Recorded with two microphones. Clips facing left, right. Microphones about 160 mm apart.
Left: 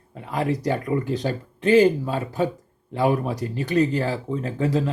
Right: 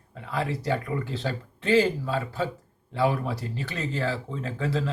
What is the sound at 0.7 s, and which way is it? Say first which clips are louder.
Speech: left 6 dB; 45° left (ahead or behind).